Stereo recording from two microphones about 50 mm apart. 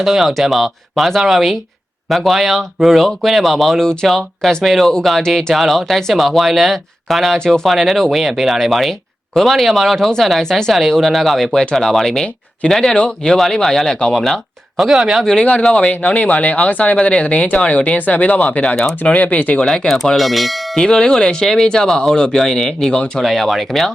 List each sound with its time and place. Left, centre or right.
0.0 s speech: centre
7.3 s speech: centre
7.7 s speech: centre
13.3 s speech: centre
14.8 s speech: centre
15.2 s speech: centre; by 19.6 s left
19.9 s speech: centre
20.7 s speech: centre
23.2 s speech: centre